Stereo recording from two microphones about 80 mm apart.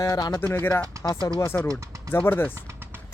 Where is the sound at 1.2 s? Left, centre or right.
Left.